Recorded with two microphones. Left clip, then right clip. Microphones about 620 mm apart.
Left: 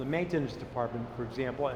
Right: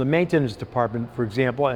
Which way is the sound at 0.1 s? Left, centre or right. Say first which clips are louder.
Right 9 dB; right.